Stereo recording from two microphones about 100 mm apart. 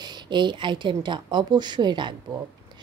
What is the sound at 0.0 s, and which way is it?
A woman's voice, 50° right (ahead or behind).